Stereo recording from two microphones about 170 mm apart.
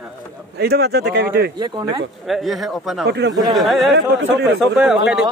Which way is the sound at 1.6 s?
25° right (ahead or behind).